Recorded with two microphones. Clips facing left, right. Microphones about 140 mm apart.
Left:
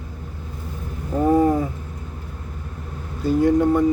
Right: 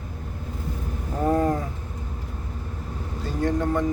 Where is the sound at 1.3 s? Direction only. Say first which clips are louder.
Left 6 dB; 10° left (ahead or behind).